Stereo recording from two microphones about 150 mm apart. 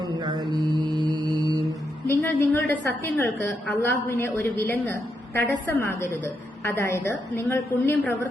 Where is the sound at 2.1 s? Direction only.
15° left (ahead or behind).